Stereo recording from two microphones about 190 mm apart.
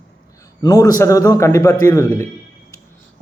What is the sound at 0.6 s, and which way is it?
Speech, 20° left (ahead or behind).